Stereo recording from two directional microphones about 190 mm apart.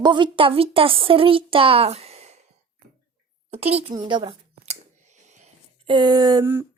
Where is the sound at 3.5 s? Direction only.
30° right (ahead or behind).